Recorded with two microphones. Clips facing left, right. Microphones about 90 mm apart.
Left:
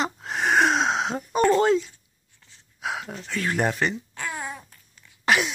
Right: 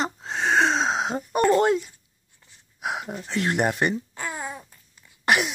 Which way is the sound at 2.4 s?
15° right (ahead or behind).